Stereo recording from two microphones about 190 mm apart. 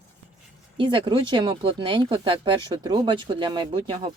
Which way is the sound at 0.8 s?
25° right (ahead or behind).